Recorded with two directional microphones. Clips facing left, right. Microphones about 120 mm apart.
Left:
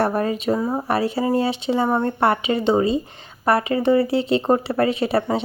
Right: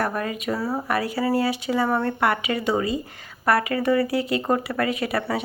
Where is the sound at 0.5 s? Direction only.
20° left (ahead or behind).